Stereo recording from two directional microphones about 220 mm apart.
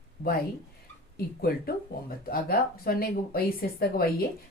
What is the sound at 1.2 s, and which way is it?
A woman's voice, 45° left (ahead or behind).